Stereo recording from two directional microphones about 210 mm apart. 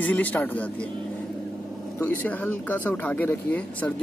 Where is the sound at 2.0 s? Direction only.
10° left (ahead or behind).